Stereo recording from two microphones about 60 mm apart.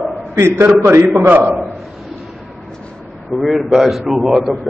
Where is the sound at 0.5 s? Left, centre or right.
Right.